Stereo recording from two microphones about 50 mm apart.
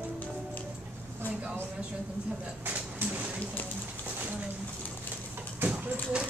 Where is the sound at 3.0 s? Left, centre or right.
Right.